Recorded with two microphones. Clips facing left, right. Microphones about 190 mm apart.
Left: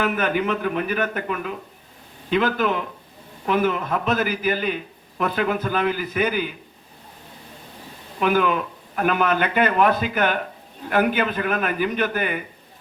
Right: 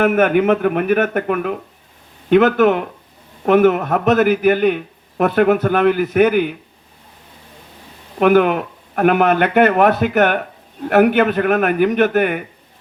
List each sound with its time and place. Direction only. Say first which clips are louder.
0.0 s a man's voice: right 8 dB; 50° right (ahead or behind)
8.2 s a man's voice: right 7 dB; 60° right (ahead or behind)